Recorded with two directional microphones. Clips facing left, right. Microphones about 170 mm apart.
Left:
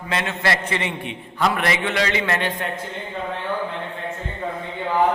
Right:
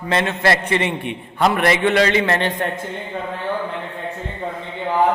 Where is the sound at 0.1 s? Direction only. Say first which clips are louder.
Right 5 dB; 40° right (ahead or behind).